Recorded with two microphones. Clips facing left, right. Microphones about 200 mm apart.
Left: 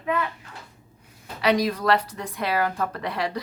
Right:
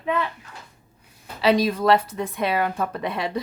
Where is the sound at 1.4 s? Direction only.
25° right (ahead or behind).